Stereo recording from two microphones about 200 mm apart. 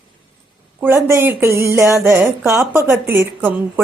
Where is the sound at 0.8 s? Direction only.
10° right (ahead or behind).